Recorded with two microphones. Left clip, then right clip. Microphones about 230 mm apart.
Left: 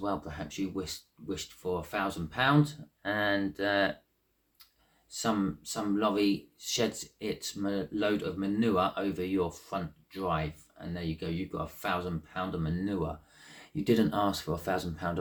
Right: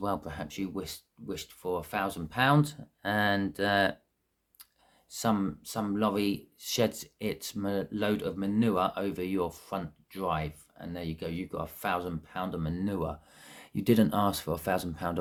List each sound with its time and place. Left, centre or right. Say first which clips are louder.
0.0 s speech: right 1 dB; right
5.1 s speech: right 1 dB; right